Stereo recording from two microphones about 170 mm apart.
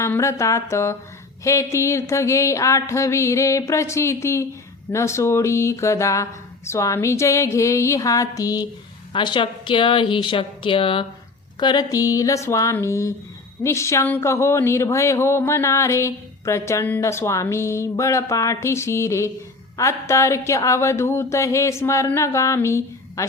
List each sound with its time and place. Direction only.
0.0 s a woman's voice: 15° left (ahead or behind)